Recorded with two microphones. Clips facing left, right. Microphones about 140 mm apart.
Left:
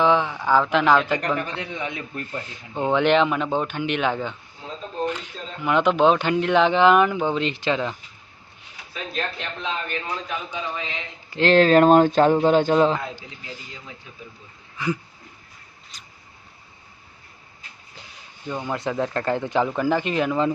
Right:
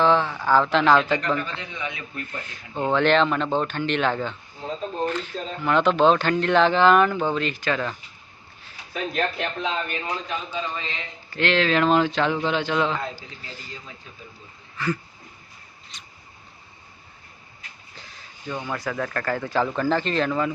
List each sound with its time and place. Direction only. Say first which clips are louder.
0.0 s speech: even; 15° left (ahead or behind)
1.4 s a man's voice: left 3 dB; 60° left (ahead or behind)
2.3 s speech: left 2 dB; 15° left (ahead or behind)
8.9 s speech: right 4 dB; 45° right (ahead or behind)
10.2 s speech: even; 10° left (ahead or behind)
11.3 s speech: left 6 dB; 40° left (ahead or behind)
13.1 s speech: left 2 dB; 15° left (ahead or behind)
15.9 s mouse: right 1 dB; centre (ahead or behind)
18.4 s speech: left 2 dB; 15° left (ahead or behind)